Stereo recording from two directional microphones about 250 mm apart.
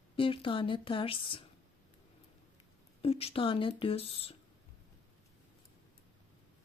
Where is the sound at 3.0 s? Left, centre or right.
Left.